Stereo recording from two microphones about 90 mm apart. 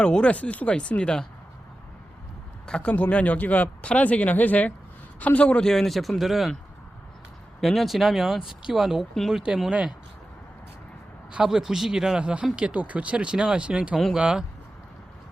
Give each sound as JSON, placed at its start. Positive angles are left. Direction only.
{"t": 0.0, "sound": "speech", "side_deg": 10}
{"t": 2.6, "sound": "speech", "side_deg": 10}
{"t": 7.6, "sound": "speech", "side_deg": 0}
{"t": 11.3, "sound": "speech", "side_deg": -10}